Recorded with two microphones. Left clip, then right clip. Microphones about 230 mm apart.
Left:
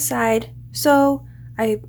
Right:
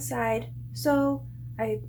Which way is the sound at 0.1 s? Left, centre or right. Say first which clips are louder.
Left 8 dB; left.